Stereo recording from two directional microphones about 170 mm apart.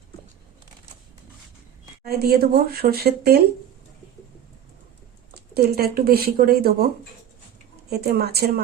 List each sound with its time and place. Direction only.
2.0 s speech: 65° right (ahead or behind)
5.3 s speech: 70° right (ahead or behind)
7.9 s a woman's voice: 70° right (ahead or behind)